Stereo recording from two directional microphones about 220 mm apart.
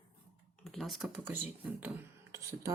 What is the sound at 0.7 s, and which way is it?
Speech, centre (ahead or behind).